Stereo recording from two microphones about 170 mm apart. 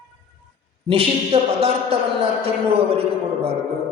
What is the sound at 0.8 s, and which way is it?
A man's voice, 35° right (ahead or behind).